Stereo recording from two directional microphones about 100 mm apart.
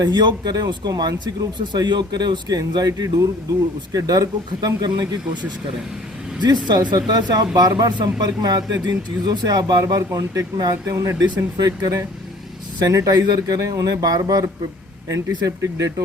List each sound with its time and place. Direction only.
0.0 s speech: 45° right (ahead or behind)